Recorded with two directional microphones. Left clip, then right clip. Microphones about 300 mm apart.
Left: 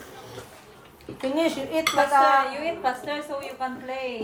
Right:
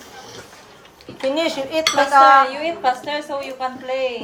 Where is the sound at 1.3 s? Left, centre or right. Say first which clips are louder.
Right 2 dB; centre.